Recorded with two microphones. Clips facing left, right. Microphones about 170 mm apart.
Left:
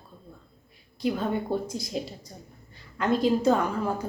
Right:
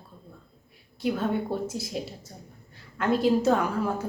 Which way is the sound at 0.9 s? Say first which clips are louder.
Even; 5° right (ahead or behind).